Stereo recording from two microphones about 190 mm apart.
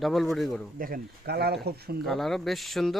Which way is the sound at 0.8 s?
55° right (ahead or behind).